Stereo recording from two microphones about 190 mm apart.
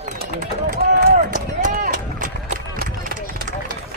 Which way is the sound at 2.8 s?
45° right (ahead or behind).